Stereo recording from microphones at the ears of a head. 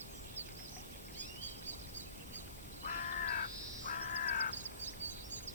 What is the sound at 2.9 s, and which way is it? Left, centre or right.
Crow, left.